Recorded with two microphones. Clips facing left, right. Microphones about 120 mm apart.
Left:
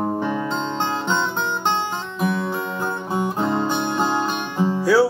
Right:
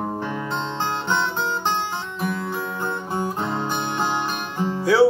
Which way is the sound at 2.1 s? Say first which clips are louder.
Left 5 dB; 15° left (ahead or behind).